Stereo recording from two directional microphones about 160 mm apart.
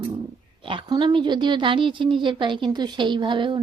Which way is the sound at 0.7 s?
30° right (ahead or behind).